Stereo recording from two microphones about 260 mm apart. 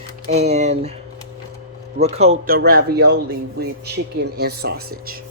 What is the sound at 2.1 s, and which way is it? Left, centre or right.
Speech, right.